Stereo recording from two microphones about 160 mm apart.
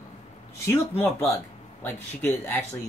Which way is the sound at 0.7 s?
15° left (ahead or behind).